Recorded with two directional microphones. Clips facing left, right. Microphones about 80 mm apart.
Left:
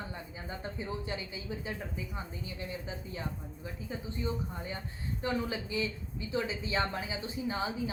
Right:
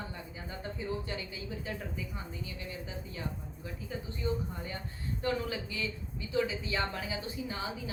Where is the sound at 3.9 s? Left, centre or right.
Left.